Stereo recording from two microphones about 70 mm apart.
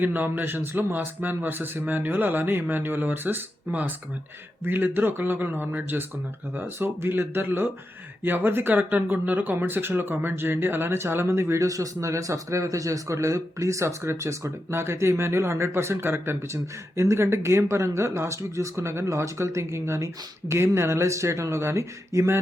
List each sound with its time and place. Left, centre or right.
0.0 s speech: right